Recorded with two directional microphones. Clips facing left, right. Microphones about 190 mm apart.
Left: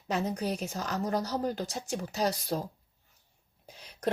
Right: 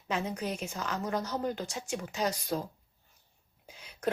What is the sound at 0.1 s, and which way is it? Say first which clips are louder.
Speech: left 3 dB; 35° left (ahead or behind).